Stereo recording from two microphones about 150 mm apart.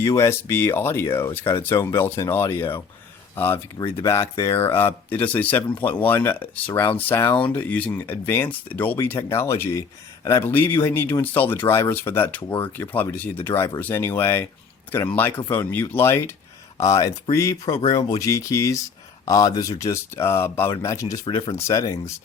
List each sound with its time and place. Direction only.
0.0 s speech: 20° left (ahead or behind)
21.2 s speech: 30° left (ahead or behind)
21.5 s speech: 20° left (ahead or behind)